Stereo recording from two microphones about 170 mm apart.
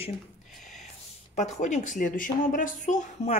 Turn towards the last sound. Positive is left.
turn(degrees=45)  # may be behind; listen again after turning